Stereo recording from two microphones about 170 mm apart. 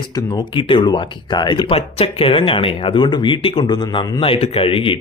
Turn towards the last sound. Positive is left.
turn(degrees=30)  # may be behind; listen again after turning